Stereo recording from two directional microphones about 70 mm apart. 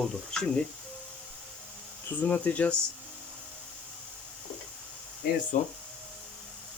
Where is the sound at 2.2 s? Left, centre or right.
Left.